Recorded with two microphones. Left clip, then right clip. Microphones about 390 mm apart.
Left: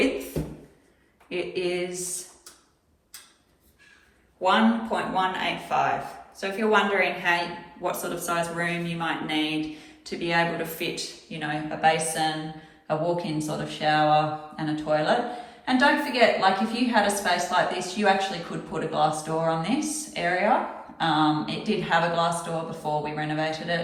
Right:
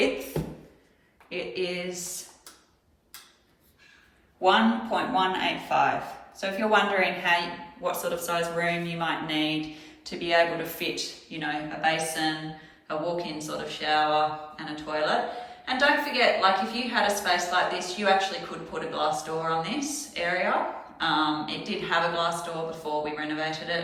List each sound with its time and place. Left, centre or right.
1.3 s speech: centre
4.4 s a woman's voice: centre